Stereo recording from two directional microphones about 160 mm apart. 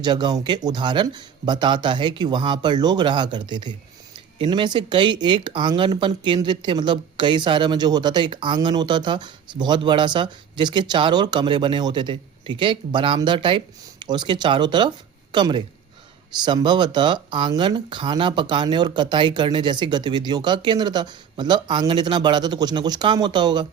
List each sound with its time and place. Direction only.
0.0 s speech: 25° right (ahead or behind)